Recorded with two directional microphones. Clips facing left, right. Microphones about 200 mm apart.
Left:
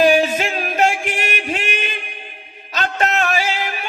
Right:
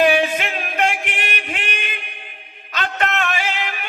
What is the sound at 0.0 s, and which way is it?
Music, 40° left (ahead or behind).